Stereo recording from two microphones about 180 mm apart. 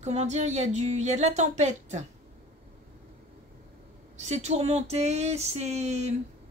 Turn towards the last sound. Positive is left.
turn(degrees=-40)  # may be behind; listen again after turning